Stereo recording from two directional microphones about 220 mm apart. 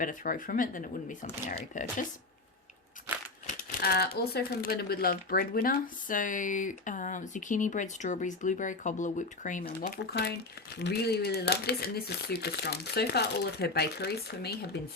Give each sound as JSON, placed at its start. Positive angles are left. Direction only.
{"t": 0.0, "sound": "speech", "side_deg": 35}
{"t": 3.8, "sound": "speech", "side_deg": 45}